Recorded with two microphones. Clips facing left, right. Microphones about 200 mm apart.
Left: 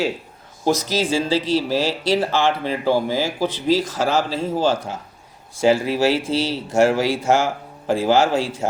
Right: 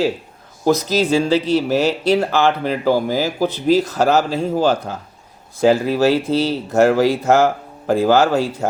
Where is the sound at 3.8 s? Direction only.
65° right (ahead or behind).